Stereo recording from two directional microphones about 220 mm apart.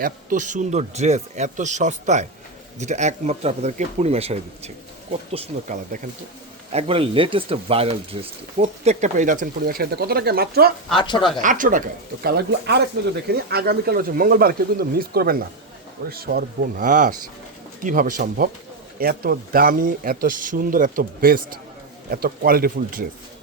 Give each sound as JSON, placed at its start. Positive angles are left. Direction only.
{"t": 0.0, "sound": "speech", "side_deg": -35}
{"t": 10.9, "sound": "speech", "side_deg": 20}
{"t": 11.4, "sound": "speech", "side_deg": -35}